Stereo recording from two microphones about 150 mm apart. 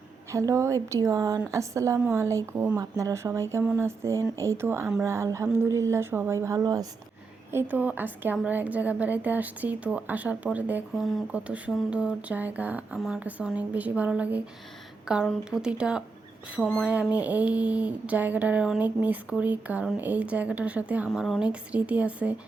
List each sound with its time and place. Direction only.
0.3 s a woman's voice: 20° right (ahead or behind)
7.5 s speech: 10° right (ahead or behind)